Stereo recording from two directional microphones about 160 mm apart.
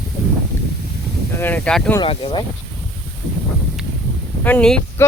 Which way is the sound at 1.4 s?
10° left (ahead or behind).